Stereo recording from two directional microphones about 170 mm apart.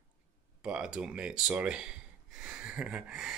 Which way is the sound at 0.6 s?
5° right (ahead or behind).